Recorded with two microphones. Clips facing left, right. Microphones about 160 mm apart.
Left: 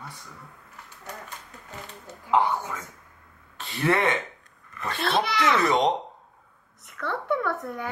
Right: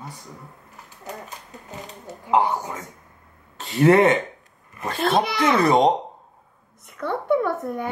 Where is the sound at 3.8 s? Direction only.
40° right (ahead or behind).